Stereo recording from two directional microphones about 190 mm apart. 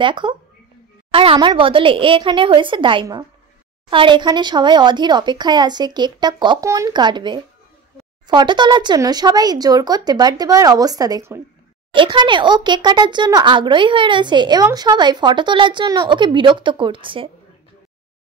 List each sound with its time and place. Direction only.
0.0 s speech: 25° right (ahead or behind)